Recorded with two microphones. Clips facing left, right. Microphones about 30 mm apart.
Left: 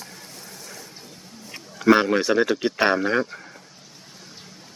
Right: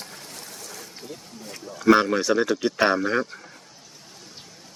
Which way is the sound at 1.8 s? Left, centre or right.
Centre.